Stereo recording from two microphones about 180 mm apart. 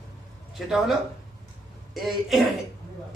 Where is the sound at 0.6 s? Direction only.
Centre (ahead or behind).